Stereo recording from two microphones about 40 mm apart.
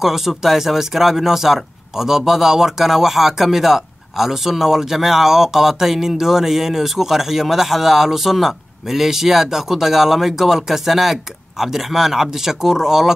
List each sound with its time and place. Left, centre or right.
0.0 s speech: centre